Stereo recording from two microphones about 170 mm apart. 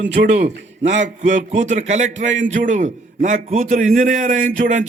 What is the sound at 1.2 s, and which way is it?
A man's voice, 45° right (ahead or behind).